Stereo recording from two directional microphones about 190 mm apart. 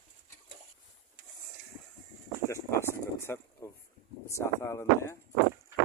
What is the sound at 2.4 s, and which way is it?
Speech, 15° left (ahead or behind).